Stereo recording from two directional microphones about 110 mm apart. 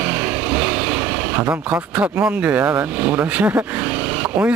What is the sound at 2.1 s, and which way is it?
Speech, 15° right (ahead or behind).